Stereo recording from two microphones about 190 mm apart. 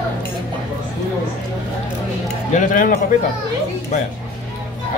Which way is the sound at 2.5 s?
45° left (ahead or behind).